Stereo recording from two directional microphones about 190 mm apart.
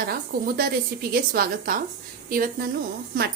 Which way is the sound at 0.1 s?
50° right (ahead or behind).